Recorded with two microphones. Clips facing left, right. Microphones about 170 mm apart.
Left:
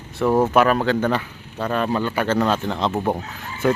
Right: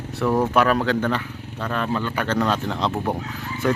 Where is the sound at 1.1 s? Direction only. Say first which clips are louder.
Left 2 dB; 15° left (ahead or behind).